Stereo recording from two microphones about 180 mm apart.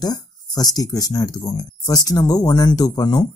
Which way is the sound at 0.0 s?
20° left (ahead or behind).